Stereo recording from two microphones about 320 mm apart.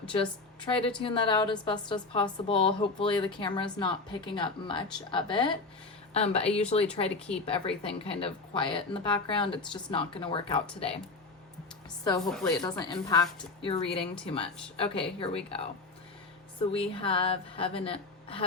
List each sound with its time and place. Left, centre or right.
0.1 s a woman's voice: centre
12.2 s a woman's voice: centre
12.5 s a woman's voice: centre